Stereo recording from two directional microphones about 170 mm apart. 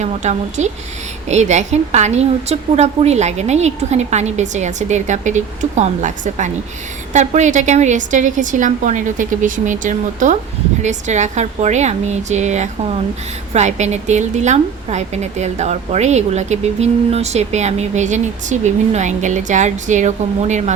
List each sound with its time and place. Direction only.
0.0 s a woman's voice: 45° right (ahead or behind)